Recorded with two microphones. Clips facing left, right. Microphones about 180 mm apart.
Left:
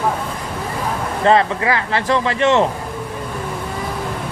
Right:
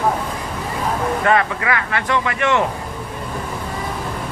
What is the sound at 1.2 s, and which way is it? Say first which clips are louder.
Speech: left 6 dB; 30° left (ahead or behind).